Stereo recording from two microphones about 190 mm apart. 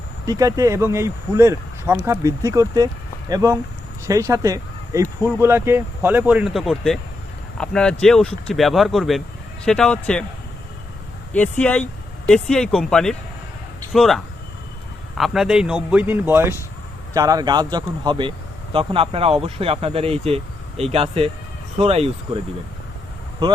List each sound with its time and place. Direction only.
0.3 s speech: 20° right (ahead or behind); by 10.2 s 5° left (ahead or behind)
11.3 s speech: 10° left (ahead or behind); by 22.4 s 30° right (ahead or behind)